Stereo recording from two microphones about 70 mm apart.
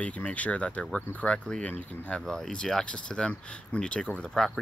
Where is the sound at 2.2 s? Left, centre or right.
Centre.